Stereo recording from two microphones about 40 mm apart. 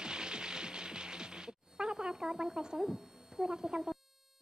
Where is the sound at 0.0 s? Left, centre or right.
Centre.